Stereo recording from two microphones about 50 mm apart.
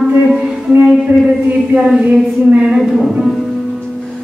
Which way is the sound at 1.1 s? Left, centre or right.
Right.